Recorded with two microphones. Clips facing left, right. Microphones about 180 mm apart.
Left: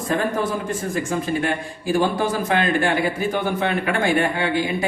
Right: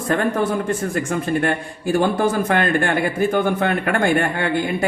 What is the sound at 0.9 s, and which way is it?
A man's voice, 60° right (ahead or behind).